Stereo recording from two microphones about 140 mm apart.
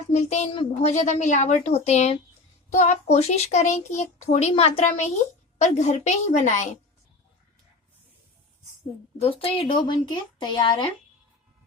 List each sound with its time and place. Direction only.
0.1 s a child's voice: 50° left (ahead or behind)
4.9 s a woman's voice: 55° left (ahead or behind)
9.1 s speech: 45° left (ahead or behind)